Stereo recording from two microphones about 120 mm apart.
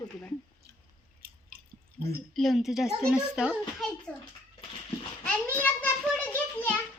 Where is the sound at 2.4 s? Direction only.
Centre (ahead or behind).